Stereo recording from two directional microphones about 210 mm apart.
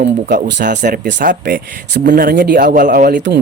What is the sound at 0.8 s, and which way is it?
Speech, 40° right (ahead or behind).